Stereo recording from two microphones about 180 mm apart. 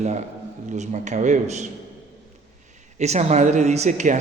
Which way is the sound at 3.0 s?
40° right (ahead or behind).